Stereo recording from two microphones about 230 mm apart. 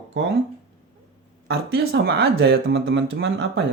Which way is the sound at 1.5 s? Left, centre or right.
Right.